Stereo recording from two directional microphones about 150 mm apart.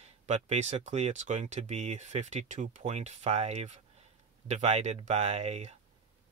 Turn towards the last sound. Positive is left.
turn(degrees=-45)  # may be behind; listen again after turning